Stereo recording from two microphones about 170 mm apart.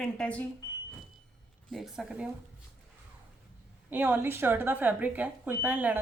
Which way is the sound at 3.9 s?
10° right (ahead or behind).